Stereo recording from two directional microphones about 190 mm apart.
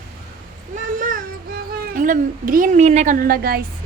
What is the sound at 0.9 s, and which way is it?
Child singing, 45° right (ahead or behind).